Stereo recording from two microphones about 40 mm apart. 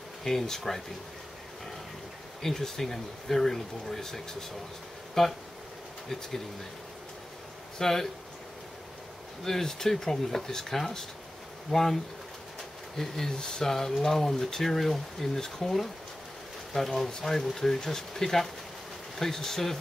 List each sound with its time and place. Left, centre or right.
0.2 s speech: centre
2.4 s speech: centre
7.8 s speech: centre
9.4 s speech: centre